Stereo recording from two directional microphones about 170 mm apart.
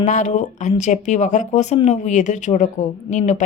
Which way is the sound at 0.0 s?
45° left (ahead or behind).